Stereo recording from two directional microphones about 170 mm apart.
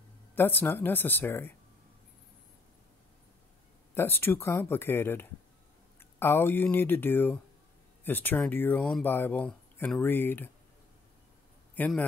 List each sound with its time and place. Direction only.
0.4 s speech: 10° left (ahead or behind)
3.9 s speech: 15° left (ahead or behind)
11.7 s a man's voice: 10° left (ahead or behind)